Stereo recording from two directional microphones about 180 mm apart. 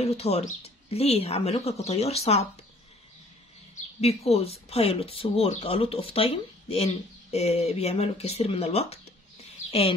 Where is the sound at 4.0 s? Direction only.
35° left (ahead or behind).